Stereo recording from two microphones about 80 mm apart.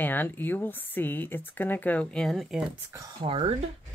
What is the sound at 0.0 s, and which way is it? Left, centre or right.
Speech, left.